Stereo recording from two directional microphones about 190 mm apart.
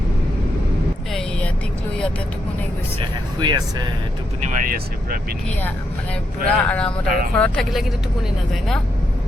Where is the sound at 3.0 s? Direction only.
25° right (ahead or behind).